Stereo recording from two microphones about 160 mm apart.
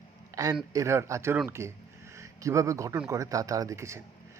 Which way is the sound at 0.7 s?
20° right (ahead or behind).